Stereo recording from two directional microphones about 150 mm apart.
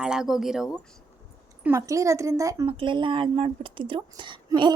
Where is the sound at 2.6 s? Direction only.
35° right (ahead or behind).